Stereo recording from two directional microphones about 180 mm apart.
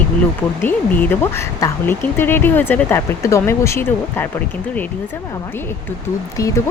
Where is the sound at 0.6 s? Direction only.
10° left (ahead or behind).